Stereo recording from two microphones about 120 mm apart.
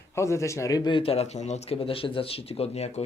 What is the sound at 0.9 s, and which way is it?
Speech, 50° left (ahead or behind).